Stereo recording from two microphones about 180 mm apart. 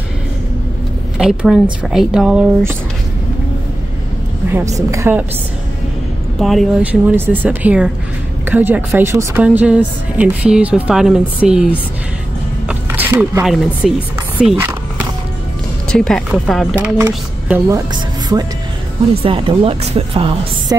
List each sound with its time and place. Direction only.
1.1 s speech: 5° right (ahead or behind)
4.7 s speech: 15° right (ahead or behind)
6.4 s speech: centre (ahead or behind)
12.6 s zipper: 10° right (ahead or behind)
14.4 s speech: 5° right (ahead or behind)
15.9 s speech: 5° left (ahead or behind); by 18.4 s 20° right (ahead or behind)
19.2 s speech: 30° right (ahead or behind)